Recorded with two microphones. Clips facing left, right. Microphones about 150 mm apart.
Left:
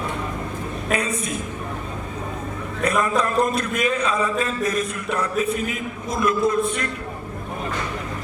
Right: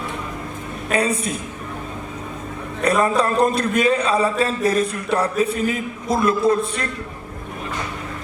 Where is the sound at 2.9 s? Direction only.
30° right (ahead or behind).